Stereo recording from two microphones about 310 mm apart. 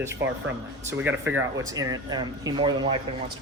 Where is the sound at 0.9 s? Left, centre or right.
Centre.